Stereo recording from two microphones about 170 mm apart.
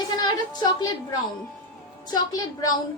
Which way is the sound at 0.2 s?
25° left (ahead or behind).